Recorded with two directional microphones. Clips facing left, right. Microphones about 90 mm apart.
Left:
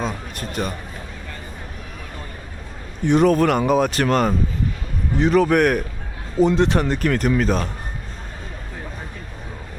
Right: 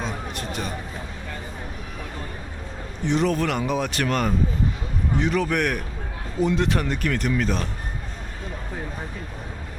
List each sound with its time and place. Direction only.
0.0 s a sound: 45° left (ahead or behind)
3.0 s speech: 50° left (ahead or behind)
6.4 s speech: 30° left (ahead or behind)